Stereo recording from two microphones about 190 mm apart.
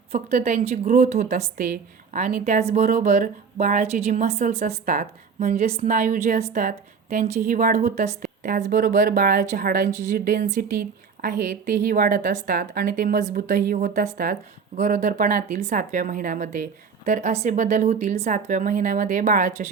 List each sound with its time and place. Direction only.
0.1 s a woman's voice: 35° right (ahead or behind)